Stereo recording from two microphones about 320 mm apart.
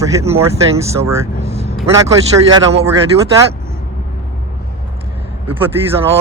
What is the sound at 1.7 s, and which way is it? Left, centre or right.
Speech, centre.